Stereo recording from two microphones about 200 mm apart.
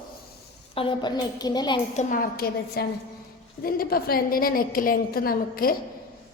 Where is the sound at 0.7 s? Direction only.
25° left (ahead or behind).